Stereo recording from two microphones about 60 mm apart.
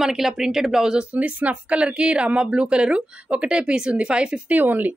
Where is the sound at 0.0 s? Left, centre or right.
Centre.